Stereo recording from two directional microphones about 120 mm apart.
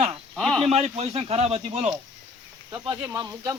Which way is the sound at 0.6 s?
60° right (ahead or behind).